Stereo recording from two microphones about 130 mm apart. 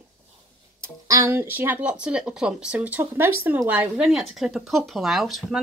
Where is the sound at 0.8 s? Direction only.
20° right (ahead or behind); by 5.6 s centre (ahead or behind).